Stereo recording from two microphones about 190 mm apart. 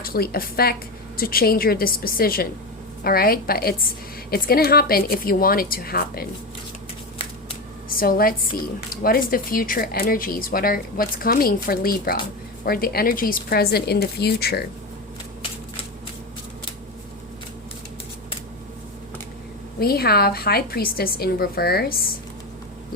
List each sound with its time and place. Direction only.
0.0 s speech: 50° left (ahead or behind)
7.9 s a woman's voice: 50° left (ahead or behind)
19.8 s speech: 55° left (ahead or behind)